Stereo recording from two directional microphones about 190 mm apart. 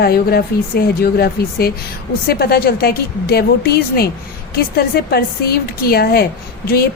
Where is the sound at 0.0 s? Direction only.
55° left (ahead or behind).